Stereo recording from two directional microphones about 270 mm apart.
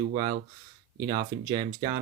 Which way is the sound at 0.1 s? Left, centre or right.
Centre.